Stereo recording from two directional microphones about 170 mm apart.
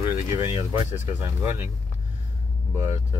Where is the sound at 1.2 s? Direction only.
15° right (ahead or behind).